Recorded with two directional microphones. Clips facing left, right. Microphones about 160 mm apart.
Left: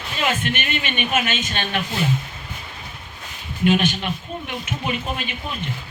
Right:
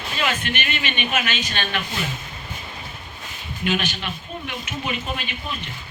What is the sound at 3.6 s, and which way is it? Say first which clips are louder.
Speech: left 6 dB; 50° left (ahead or behind).